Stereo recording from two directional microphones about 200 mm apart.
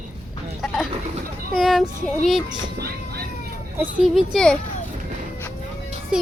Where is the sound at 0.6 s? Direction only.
Centre (ahead or behind).